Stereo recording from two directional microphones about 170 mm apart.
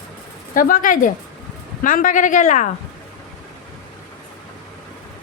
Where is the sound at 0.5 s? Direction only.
55° left (ahead or behind).